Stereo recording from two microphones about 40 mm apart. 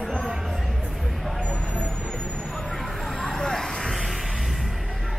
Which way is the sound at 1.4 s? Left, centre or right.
Left.